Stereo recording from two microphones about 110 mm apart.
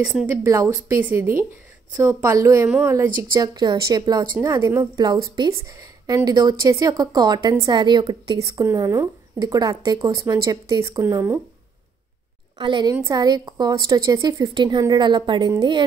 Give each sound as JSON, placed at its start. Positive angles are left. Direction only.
{"t": 0.4, "sound": "a woman's voice", "side_deg": -30}
{"t": 8.7, "sound": "a woman's voice", "side_deg": -25}
{"t": 12.5, "sound": "a woman's voice", "side_deg": -45}